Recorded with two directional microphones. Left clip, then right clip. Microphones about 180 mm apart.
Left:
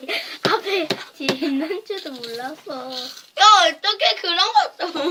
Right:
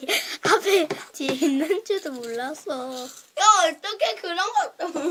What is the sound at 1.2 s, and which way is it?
Speech, 50° right (ahead or behind).